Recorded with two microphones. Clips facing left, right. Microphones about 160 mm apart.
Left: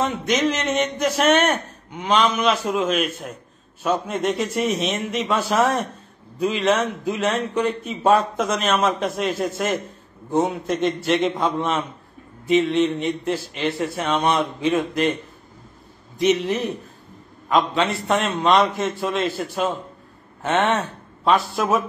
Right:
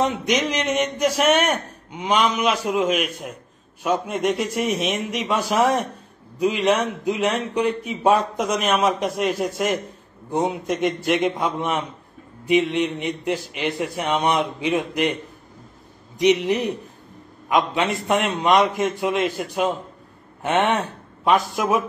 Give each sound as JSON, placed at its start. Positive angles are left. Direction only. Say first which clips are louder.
{"t": 0.0, "sound": "a man's voice", "louder": "even", "side_deg": -15}
{"t": 10.8, "sound": "a man's voice", "louder": "even", "side_deg": -15}
{"t": 16.2, "sound": "a man's voice", "louder": "right 1 dB", "side_deg": -15}